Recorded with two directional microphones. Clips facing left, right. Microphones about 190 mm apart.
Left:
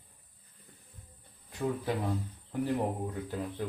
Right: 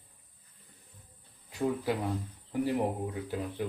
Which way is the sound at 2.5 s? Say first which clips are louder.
Right 1 dB; 10° right (ahead or behind).